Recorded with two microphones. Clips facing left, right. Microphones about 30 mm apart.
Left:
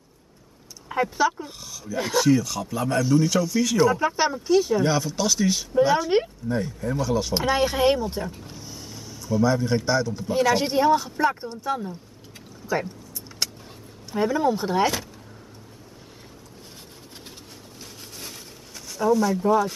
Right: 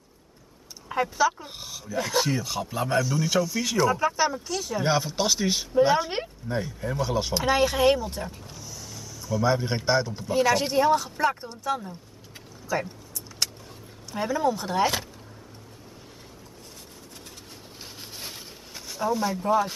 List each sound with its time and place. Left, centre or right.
0.8 s a sound: centre
1.5 s speech: right
3.0 s speech: centre
4.2 s speech: centre
4.8 s speech: centre
7.5 s speech: centre
8.5 s vehicle: left
9.4 s speech: right
10.2 s speech: centre
12.6 s a sound: centre
14.1 s speech: centre
17.7 s a sound: right
19.3 s speech: centre